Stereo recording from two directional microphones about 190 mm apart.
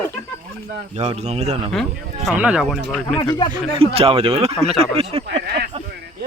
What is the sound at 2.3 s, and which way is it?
Speech, 5° right (ahead or behind).